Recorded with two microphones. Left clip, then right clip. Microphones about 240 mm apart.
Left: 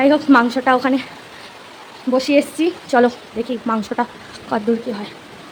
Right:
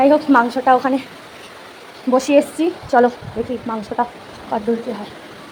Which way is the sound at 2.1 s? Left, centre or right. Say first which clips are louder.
Right 2 dB; centre.